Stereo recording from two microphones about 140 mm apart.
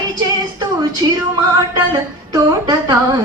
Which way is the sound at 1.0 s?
25° right (ahead or behind).